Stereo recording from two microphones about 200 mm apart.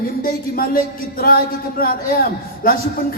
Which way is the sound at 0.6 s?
45° left (ahead or behind).